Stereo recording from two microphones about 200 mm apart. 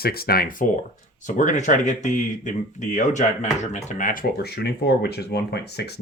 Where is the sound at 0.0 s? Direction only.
50° left (ahead or behind).